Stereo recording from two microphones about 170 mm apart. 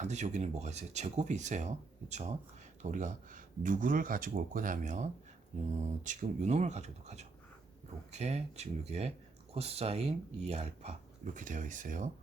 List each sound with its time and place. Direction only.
0.0 s speech: 45° right (ahead or behind)